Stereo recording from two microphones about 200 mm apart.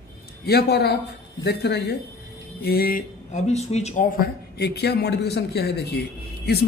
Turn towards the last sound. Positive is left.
turn(degrees=55)  # may be behind; listen again after turning